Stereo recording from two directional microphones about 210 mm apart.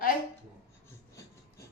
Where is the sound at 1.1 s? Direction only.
15° left (ahead or behind).